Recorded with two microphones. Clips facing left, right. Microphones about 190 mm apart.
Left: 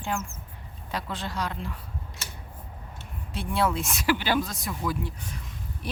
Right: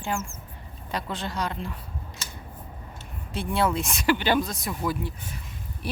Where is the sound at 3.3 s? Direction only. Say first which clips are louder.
Right 1 dB; centre (ahead or behind).